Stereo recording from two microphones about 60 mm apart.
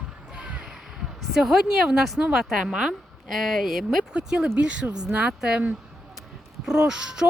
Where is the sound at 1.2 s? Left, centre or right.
Centre.